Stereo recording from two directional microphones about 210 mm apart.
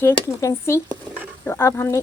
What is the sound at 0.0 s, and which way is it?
Speech, 10° left (ahead or behind).